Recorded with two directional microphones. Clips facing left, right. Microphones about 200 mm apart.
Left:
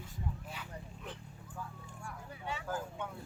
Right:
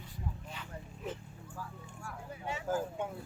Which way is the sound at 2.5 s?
45° right (ahead or behind).